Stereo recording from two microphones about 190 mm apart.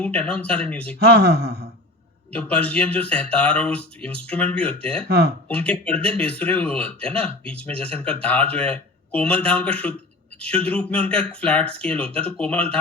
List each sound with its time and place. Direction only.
0.0 s a man's voice: 5° left (ahead or behind)
0.9 s speech: 55° right (ahead or behind)
2.3 s a man's voice: 5° left (ahead or behind)
5.0 s speech: 60° right (ahead or behind)
5.5 s a man's voice: 5° left (ahead or behind)